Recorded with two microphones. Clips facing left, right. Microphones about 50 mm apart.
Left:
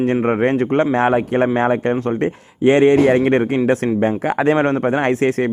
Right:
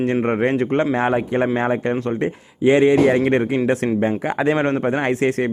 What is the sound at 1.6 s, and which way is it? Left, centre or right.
Speech, left.